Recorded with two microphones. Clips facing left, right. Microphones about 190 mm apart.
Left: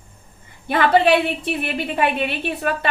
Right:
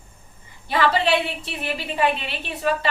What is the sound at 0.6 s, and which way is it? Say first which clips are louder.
A woman's voice: left 5 dB; 55° left (ahead or behind).